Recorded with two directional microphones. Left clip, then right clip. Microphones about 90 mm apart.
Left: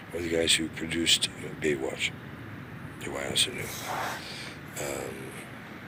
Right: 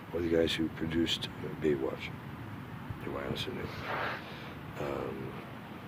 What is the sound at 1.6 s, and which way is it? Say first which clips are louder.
Speech: left 2 dB; 20° right (ahead or behind).